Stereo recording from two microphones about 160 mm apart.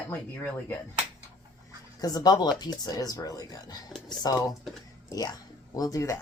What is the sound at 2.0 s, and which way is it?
Speech, 25° left (ahead or behind).